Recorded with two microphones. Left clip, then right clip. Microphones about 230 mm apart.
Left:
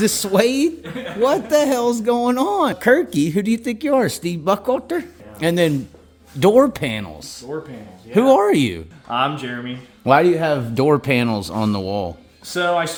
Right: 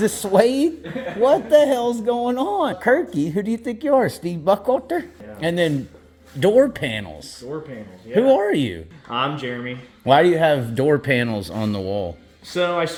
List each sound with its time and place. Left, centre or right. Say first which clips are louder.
0.0 s speech: even; left
8.1 s speech: left 3 dB; left